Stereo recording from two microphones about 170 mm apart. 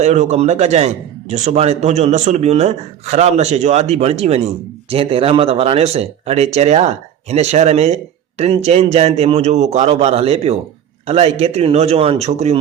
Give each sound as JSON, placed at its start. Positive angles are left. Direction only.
{"t": 0.0, "sound": "a man's voice", "side_deg": -40}